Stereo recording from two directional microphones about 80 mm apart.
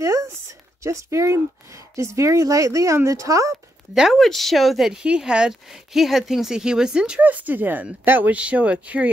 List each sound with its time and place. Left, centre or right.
0.0 s a sound: right
0.8 s speech: right
4.1 s speech: centre